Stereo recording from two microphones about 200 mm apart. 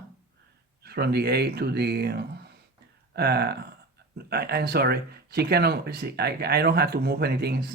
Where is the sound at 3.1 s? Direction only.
55° right (ahead or behind).